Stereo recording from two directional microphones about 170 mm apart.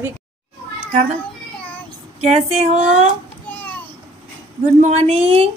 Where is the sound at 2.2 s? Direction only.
40° right (ahead or behind).